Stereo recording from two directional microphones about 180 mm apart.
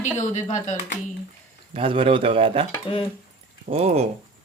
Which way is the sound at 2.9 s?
30° left (ahead or behind).